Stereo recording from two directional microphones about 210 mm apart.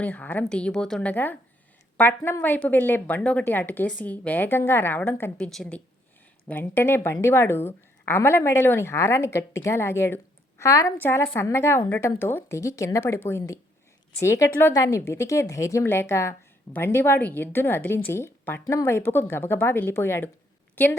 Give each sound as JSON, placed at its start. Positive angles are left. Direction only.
{"t": 0.0, "sound": "a woman's voice", "side_deg": 5}